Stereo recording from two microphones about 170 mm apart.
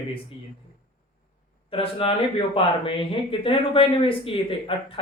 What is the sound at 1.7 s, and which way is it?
Speech, 35° left (ahead or behind).